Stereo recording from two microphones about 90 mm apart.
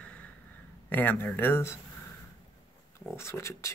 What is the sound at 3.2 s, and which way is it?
Speech, 30° left (ahead or behind).